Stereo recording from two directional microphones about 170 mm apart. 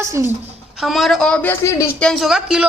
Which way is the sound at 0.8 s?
Centre (ahead or behind).